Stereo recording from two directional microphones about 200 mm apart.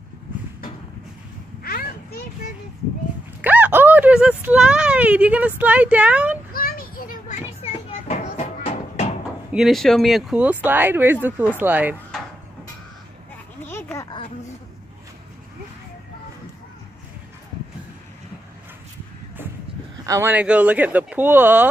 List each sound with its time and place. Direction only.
1.6 s a sound: 50° left (ahead or behind)
3.3 s speech: 10° right (ahead or behind)
6.5 s children playing: 45° left (ahead or behind)
9.5 s speech: centre (ahead or behind)
13.7 s a sound: 10° left (ahead or behind)
20.1 s speech: 10° right (ahead or behind)